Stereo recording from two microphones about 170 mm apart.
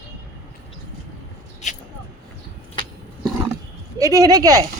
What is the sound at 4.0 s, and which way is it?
Speech, 20° right (ahead or behind).